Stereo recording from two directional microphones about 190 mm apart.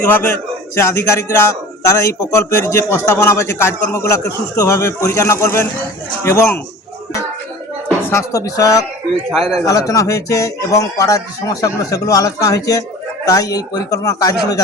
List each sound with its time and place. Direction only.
0.1 s music: 10° left (ahead or behind)
7.9 s speech: 15° left (ahead or behind)
9.3 s speech: centre (ahead or behind)
9.6 s music: 15° left (ahead or behind)
13.2 s speech: 20° left (ahead or behind)